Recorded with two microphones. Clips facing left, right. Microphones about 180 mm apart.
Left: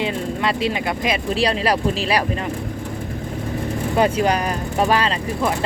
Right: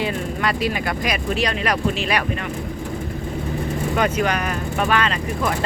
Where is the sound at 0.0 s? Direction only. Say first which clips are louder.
Left 1 dB; 25° left (ahead or behind).